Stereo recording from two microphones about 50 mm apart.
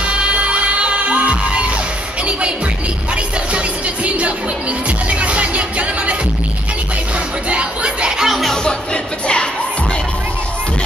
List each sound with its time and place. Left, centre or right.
0.0 s music: right
3.5 s music: right
7.4 s music: right
8.2 s music: centre
8.6 s music: centre